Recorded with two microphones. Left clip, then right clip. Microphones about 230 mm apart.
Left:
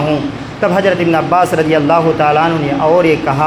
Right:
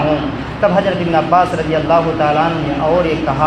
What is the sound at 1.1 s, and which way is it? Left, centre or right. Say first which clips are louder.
Speech: left 1 dB; left.